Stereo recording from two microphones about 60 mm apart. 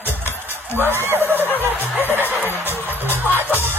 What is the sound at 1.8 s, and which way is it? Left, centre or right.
Music, right.